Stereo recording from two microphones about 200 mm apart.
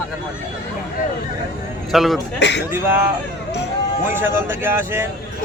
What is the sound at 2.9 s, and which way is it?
Speech, 10° right (ahead or behind).